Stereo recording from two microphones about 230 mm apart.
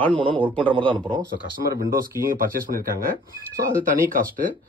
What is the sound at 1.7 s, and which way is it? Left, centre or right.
Speech, right.